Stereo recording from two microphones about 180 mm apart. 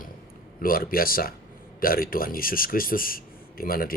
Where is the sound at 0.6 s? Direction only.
55° left (ahead or behind).